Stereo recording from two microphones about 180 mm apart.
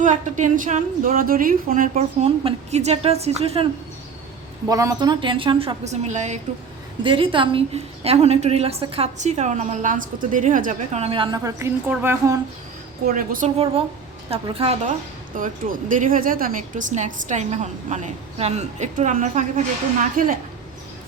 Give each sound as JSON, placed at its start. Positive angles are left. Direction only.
{"t": 0.0, "sound": "a woman's voice", "side_deg": -45}
{"t": 4.7, "sound": "a woman's voice", "side_deg": -20}
{"t": 7.0, "sound": "a woman's voice", "side_deg": -30}
{"t": 13.1, "sound": "speech", "side_deg": -50}
{"t": 14.3, "sound": "a woman's voice", "side_deg": -30}
{"t": 15.4, "sound": "a woman's voice", "side_deg": -50}